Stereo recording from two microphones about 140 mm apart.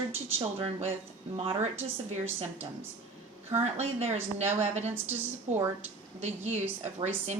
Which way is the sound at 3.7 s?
50° right (ahead or behind).